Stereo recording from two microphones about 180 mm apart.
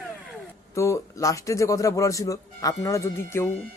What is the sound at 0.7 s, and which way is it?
Speech, 15° left (ahead or behind).